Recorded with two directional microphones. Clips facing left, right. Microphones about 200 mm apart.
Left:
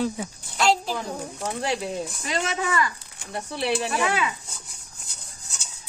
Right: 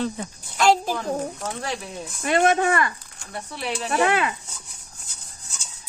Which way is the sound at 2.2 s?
55° right (ahead or behind).